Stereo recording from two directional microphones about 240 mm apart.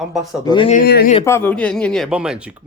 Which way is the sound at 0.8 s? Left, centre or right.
Left.